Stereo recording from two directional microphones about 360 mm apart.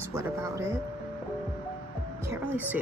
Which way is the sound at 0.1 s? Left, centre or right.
Centre.